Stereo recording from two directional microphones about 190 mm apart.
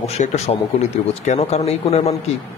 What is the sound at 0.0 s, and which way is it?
Speech, 35° left (ahead or behind).